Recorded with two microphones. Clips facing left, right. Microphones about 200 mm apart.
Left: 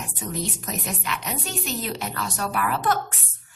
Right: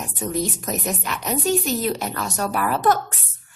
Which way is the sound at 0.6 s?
45° right (ahead or behind).